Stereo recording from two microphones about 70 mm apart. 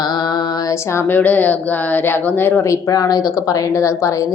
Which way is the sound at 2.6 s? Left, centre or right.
Left.